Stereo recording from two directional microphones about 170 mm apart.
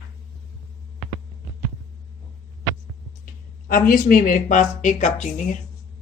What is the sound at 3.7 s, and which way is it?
Speech, 55° left (ahead or behind).